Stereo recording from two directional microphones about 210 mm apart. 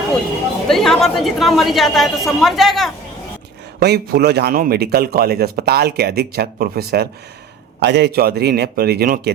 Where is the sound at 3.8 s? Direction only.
50° right (ahead or behind).